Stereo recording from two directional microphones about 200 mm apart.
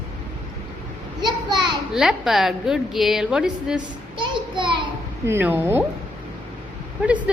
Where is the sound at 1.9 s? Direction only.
Centre (ahead or behind).